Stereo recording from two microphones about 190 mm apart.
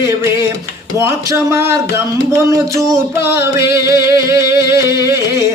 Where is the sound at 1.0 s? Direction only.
15° right (ahead or behind).